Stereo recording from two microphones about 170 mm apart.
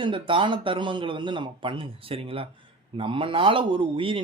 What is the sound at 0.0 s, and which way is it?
Speech, 30° right (ahead or behind).